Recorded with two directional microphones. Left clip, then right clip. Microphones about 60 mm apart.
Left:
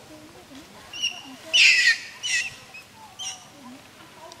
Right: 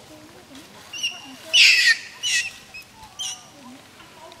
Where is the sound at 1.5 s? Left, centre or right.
Right.